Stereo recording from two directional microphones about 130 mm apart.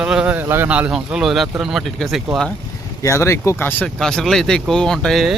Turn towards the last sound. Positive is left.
turn(degrees=5)  # may be behind; listen again after turning